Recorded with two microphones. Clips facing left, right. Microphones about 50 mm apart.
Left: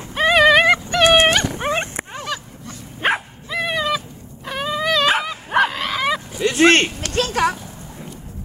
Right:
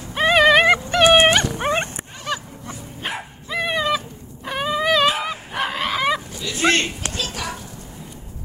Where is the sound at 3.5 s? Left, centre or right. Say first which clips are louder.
Even; centre.